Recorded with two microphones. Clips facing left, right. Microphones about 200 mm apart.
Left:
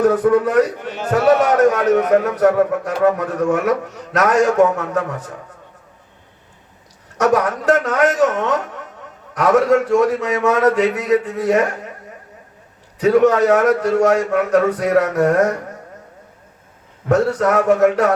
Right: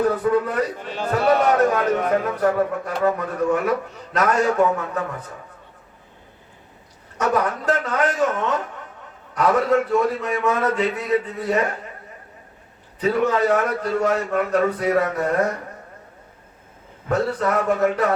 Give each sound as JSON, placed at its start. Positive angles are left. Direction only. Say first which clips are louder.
{"t": 0.0, "sound": "a man's voice", "louder": "left 5 dB", "side_deg": 80}
{"t": 7.2, "sound": "a man's voice", "louder": "left 5 dB", "side_deg": 80}
{"t": 13.0, "sound": "a man's voice", "louder": "left 7 dB", "side_deg": 80}
{"t": 17.1, "sound": "a man's voice", "louder": "left 6 dB", "side_deg": 80}